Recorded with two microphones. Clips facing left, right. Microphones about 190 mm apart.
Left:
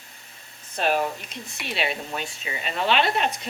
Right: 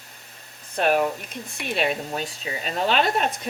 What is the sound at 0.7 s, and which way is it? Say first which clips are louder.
Speech: right 3 dB; 50° right (ahead or behind).